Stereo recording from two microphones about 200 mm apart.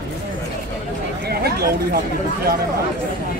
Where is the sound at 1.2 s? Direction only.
50° right (ahead or behind).